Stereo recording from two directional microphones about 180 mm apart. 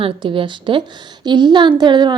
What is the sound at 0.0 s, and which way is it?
A woman's voice, 30° right (ahead or behind).